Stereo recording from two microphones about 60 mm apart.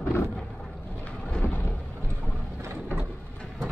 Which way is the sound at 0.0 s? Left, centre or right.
Left.